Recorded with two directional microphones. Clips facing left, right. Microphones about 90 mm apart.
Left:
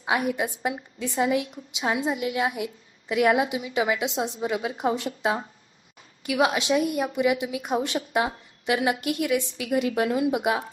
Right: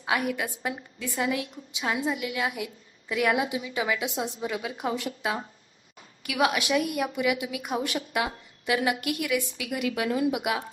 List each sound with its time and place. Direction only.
0.0 s a woman's voice: 25° left (ahead or behind)